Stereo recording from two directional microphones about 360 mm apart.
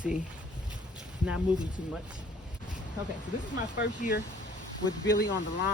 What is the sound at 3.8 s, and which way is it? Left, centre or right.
Speech, left.